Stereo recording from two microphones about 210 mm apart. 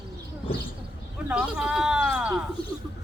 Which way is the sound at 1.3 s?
5° right (ahead or behind).